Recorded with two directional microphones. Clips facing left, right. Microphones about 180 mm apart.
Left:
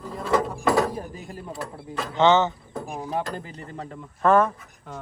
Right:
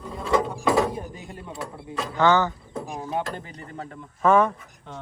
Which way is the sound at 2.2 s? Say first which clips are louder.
Left 2 dB; 20° left (ahead or behind).